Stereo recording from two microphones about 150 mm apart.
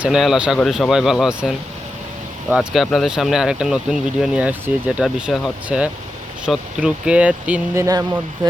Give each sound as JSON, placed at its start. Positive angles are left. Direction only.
{"t": 0.0, "sound": "speech", "side_deg": 0}
{"t": 7.8, "sound": "speech", "side_deg": -20}